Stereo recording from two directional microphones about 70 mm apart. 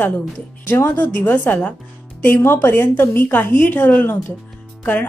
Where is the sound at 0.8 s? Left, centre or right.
Left.